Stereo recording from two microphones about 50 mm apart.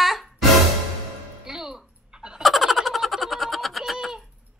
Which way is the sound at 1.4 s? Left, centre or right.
Centre.